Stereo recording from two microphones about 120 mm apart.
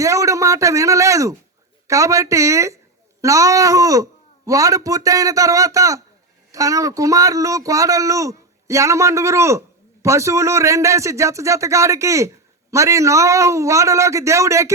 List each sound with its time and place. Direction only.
0.0 s speech: 25° right (ahead or behind)